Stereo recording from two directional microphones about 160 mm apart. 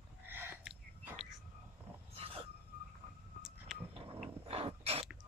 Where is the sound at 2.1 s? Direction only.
35° right (ahead or behind).